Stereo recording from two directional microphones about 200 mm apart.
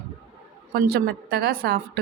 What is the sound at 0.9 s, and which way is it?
A woman's voice, 50° right (ahead or behind).